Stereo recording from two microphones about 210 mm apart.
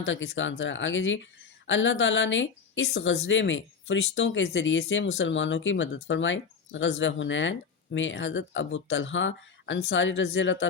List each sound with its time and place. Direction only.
0.0 s speech: 65° left (ahead or behind)